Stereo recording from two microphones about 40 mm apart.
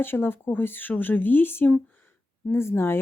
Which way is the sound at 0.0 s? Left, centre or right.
Left.